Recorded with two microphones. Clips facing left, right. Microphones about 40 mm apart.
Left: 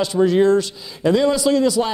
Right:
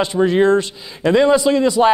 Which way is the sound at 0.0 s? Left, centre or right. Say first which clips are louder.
Right 1 dB; right.